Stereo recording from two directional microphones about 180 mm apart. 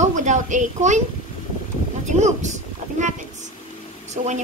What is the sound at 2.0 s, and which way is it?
Speech, 40° right (ahead or behind).